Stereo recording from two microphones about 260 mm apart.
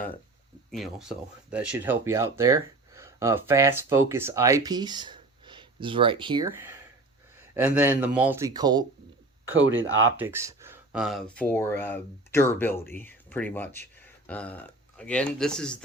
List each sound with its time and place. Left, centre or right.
0.7 s speech: centre
9.5 s speech: right
10.2 s speech: centre